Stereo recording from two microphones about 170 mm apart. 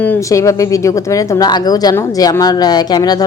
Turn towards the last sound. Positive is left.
turn(degrees=25)  # may be behind; listen again after turning